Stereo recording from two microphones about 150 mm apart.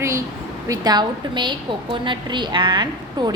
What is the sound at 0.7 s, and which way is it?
A woman's voice, 25° right (ahead or behind).